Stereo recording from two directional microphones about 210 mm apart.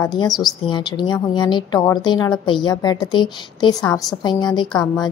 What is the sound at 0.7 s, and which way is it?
A woman's voice, 20° left (ahead or behind).